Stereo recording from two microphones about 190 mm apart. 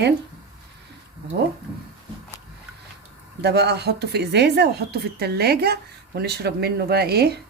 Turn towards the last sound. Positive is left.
turn(degrees=-55)  # may be behind; listen again after turning